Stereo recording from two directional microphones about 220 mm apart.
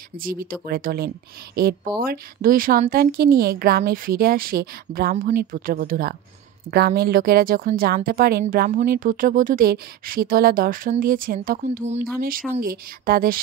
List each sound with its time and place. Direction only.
0.2 s a woman's voice: 40° right (ahead or behind)
12.5 s a woman's voice: 40° right (ahead or behind)